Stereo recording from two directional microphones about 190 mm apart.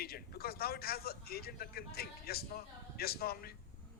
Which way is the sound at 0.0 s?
55° left (ahead or behind).